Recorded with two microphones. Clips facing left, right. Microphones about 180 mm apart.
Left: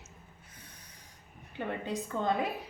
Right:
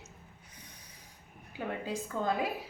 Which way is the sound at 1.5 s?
5° right (ahead or behind).